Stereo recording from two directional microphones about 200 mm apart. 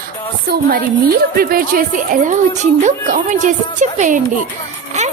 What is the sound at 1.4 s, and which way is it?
A woman's voice, 45° right (ahead or behind).